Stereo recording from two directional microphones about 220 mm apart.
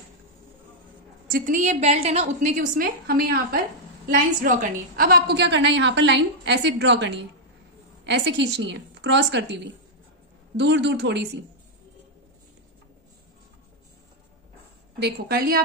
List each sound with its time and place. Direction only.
1.2 s a woman's voice: 40° right (ahead or behind)
15.0 s a woman's voice: 45° right (ahead or behind)